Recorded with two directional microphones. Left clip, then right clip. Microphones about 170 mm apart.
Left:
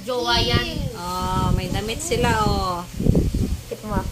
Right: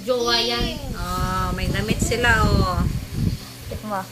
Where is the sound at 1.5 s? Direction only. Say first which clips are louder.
Right 1 dB; 10° left (ahead or behind).